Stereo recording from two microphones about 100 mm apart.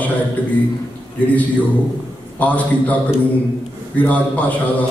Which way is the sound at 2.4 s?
15° left (ahead or behind).